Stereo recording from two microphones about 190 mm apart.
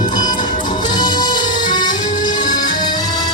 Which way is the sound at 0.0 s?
25° left (ahead or behind).